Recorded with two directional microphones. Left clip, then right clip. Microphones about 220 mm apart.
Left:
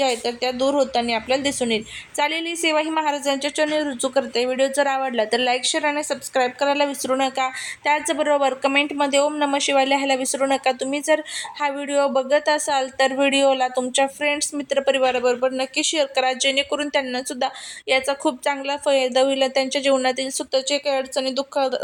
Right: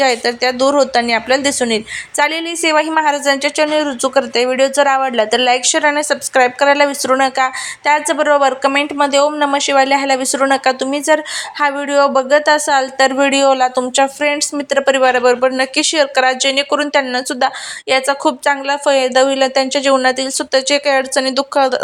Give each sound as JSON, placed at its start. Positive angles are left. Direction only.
{"t": 0.0, "sound": "speech", "side_deg": -10}